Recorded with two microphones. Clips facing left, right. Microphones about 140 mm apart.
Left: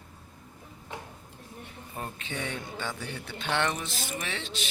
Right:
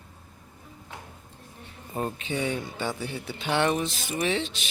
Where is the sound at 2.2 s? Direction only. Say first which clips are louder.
Right 6 dB; 10° right (ahead or behind).